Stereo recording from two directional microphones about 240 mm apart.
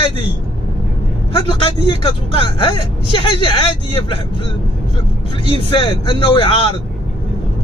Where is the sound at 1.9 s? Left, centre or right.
Left.